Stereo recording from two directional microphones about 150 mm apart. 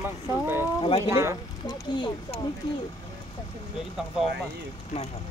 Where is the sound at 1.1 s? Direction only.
20° right (ahead or behind).